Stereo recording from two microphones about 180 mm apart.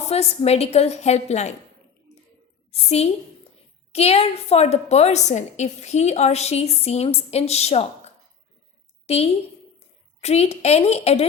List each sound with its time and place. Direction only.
0.0 s a woman's voice: 35° left (ahead or behind)
2.7 s a woman's voice: 35° left (ahead or behind)